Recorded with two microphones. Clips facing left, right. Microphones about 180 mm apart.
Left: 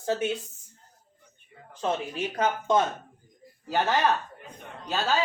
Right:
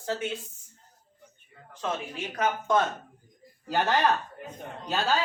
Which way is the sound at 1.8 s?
30° left (ahead or behind).